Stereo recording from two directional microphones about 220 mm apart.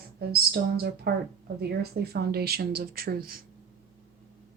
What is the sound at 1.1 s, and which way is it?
Speech, 45° right (ahead or behind).